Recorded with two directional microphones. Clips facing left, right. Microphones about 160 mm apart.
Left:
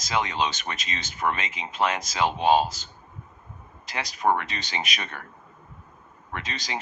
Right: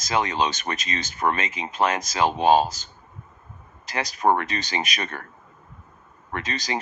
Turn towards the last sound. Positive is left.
turn(degrees=-45)  # may be behind; listen again after turning